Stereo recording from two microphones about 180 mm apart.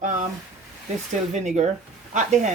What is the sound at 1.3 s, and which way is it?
Speech, 40° right (ahead or behind).